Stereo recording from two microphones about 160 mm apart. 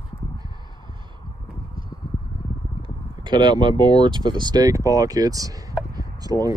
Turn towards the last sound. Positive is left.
turn(degrees=-25)  # may be behind; listen again after turning